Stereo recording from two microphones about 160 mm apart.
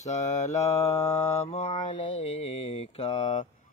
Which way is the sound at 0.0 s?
45° left (ahead or behind).